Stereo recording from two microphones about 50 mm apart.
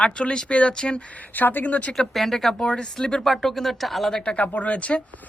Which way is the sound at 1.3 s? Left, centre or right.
Left.